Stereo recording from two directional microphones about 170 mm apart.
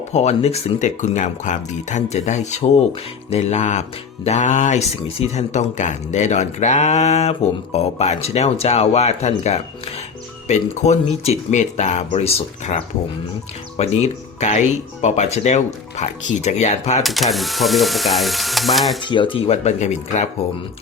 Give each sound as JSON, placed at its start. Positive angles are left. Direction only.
{"t": 0.1, "sound": "speech", "side_deg": 40}
{"t": 17.0, "sound": "speech", "side_deg": 0}
{"t": 19.0, "sound": "speech", "side_deg": 30}